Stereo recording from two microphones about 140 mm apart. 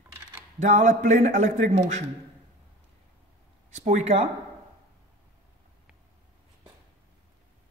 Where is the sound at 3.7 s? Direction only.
55° right (ahead or behind).